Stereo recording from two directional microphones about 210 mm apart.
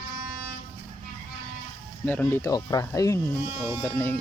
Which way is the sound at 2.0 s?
10° left (ahead or behind).